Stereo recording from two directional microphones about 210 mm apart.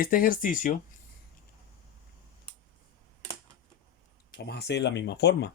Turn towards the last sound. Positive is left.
turn(degrees=55)  # may be behind; listen again after turning